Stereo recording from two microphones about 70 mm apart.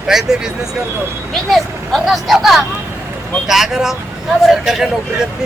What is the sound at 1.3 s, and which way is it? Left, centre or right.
Speech, centre.